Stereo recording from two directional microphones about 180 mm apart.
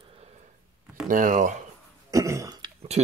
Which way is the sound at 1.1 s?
50° right (ahead or behind).